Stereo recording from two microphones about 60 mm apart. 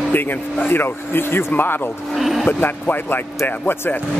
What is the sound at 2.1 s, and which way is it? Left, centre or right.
Speech, centre.